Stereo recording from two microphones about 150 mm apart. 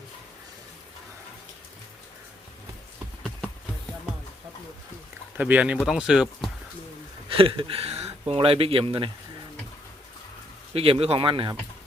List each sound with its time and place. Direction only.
5.4 s speech: 10° right (ahead or behind)
7.3 s speech: 35° right (ahead or behind)
10.8 s speech: 40° right (ahead or behind)